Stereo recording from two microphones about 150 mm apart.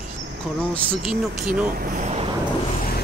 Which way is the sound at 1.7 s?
70° right (ahead or behind).